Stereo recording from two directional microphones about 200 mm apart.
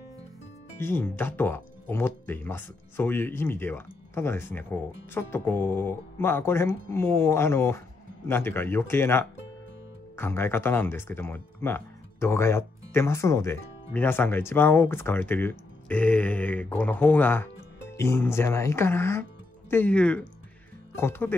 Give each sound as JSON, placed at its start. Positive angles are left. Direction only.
{"t": 0.7, "sound": "speech", "side_deg": 10}